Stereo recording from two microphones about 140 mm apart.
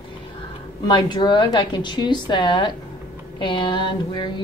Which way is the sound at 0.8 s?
30° left (ahead or behind).